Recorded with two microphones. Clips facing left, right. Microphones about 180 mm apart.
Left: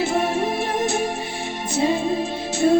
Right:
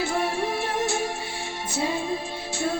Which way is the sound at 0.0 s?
20° left (ahead or behind).